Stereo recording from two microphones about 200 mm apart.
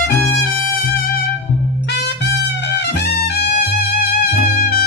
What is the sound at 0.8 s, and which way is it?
Music, 45° left (ahead or behind).